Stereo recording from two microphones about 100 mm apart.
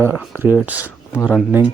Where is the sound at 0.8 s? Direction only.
20° left (ahead or behind).